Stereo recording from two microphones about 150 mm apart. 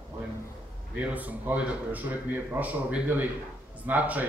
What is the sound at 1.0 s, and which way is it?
A man's voice, 10° right (ahead or behind).